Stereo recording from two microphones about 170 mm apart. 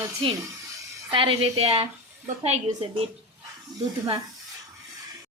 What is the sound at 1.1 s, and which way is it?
Speech, 30° right (ahead or behind).